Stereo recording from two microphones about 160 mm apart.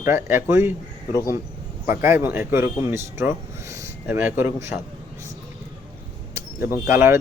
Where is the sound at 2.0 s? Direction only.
15° right (ahead or behind).